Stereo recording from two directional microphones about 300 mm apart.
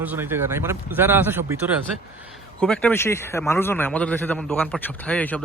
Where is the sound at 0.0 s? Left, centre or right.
Centre.